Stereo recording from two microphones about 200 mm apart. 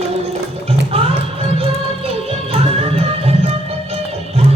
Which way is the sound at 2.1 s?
30° right (ahead or behind).